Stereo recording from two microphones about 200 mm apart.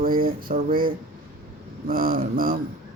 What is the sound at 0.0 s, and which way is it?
Speech, 45° right (ahead or behind).